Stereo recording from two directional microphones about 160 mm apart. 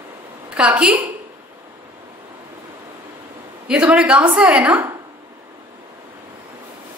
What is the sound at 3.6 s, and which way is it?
A woman's voice, 5° right (ahead or behind).